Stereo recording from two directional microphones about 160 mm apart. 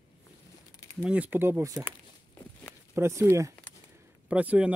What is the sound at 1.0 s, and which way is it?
Speech, 10° right (ahead or behind).